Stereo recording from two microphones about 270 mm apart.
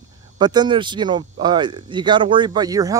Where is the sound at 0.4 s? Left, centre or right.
Centre.